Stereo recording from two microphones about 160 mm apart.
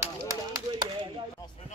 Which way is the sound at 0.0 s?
20° right (ahead or behind).